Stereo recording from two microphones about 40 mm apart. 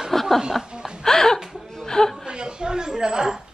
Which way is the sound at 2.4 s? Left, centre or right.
Centre.